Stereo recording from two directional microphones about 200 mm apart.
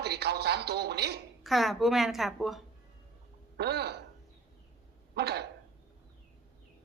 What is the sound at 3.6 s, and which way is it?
Speech, 55° right (ahead or behind).